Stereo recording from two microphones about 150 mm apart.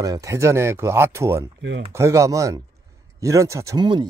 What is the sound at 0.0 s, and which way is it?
Speech, 25° right (ahead or behind).